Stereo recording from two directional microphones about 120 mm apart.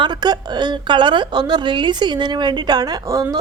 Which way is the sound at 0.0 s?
35° right (ahead or behind).